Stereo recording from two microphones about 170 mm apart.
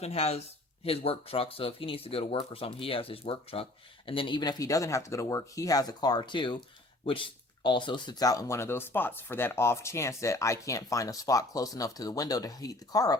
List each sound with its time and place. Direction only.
0.0 s speech: 35° left (ahead or behind); by 13.1 s 20° left (ahead or behind)